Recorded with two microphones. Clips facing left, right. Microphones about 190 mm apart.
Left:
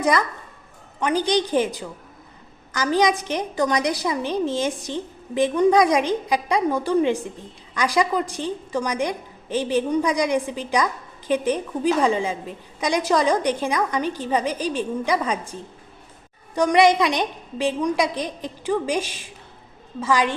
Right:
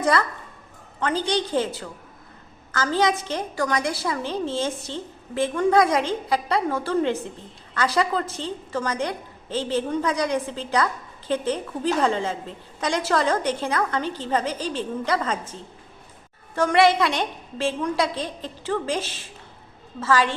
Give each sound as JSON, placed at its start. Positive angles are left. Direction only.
{"t": 0.0, "sound": "a woman's voice", "side_deg": 15}
{"t": 16.6, "sound": "a woman's voice", "side_deg": 15}